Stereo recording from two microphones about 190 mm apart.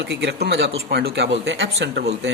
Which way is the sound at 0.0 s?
65° right (ahead or behind).